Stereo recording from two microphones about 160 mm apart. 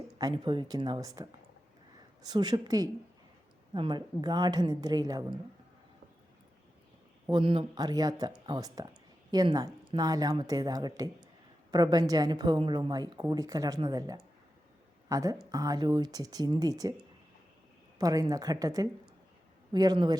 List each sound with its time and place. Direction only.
0.2 s a woman's voice: 25° right (ahead or behind)
7.3 s a woman's voice: 30° right (ahead or behind)
17.9 s a woman's voice: 20° right (ahead or behind)